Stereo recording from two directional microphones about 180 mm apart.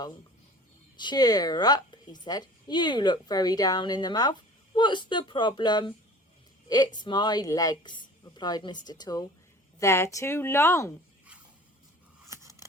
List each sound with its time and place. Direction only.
0.9 s a woman's voice: 25° left (ahead or behind)
12.3 s scissors: 15° right (ahead or behind)